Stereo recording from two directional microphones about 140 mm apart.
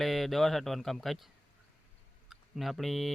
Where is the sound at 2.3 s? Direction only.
Centre (ahead or behind).